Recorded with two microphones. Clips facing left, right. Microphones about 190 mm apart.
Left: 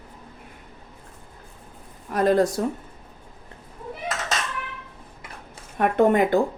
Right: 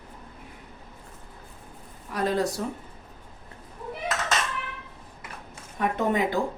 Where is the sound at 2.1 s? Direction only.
50° left (ahead or behind).